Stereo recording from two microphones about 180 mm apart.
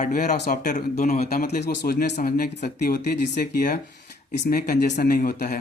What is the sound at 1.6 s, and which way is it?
Speech, 70° left (ahead or behind).